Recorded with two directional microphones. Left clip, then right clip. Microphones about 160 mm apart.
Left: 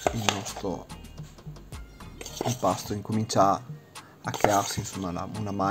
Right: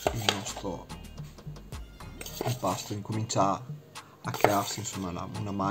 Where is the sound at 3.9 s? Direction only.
Centre (ahead or behind).